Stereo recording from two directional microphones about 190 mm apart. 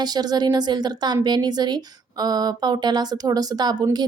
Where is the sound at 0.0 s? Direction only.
20° right (ahead or behind).